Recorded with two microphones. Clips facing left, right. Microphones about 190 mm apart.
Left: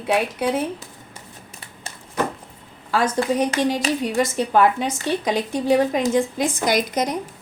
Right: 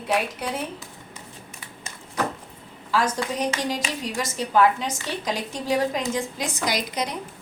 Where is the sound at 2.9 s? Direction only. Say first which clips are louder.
Left 5 dB; 55° left (ahead or behind).